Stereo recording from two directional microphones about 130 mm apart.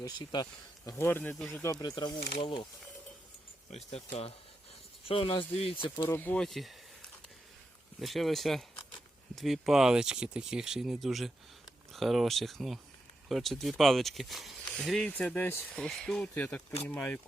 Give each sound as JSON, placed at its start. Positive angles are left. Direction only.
{"t": 0.0, "sound": "speech", "side_deg": 35}
{"t": 0.9, "sound": "speech", "side_deg": 20}
{"t": 1.7, "sound": "speech", "side_deg": 35}
{"t": 3.9, "sound": "speech", "side_deg": 50}
{"t": 6.1, "sound": "speech", "side_deg": 15}